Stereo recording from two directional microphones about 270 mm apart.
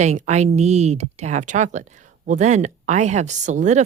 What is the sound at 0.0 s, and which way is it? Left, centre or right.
Speech, right.